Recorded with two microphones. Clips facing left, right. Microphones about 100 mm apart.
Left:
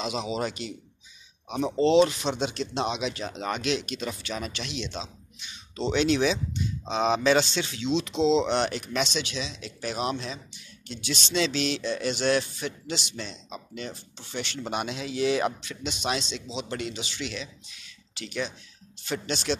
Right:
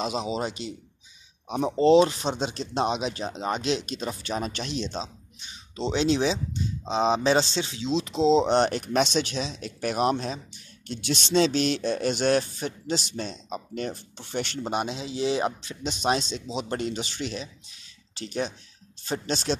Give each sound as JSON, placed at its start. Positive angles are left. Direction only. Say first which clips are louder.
{"t": 0.0, "sound": "speech", "louder": "right 1 dB", "side_deg": -35}
{"t": 14.6, "sound": "speech", "louder": "even", "side_deg": -35}